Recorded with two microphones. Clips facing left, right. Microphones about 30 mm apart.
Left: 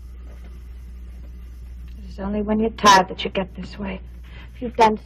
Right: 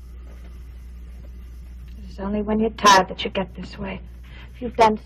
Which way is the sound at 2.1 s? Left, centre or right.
Centre.